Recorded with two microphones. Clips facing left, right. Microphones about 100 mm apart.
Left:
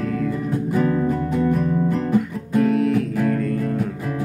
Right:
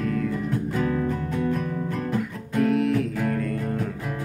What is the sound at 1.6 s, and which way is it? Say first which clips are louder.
Guitar: left 7 dB; 20° left (ahead or behind).